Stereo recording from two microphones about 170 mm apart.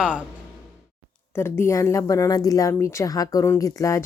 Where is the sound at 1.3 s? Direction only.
15° left (ahead or behind).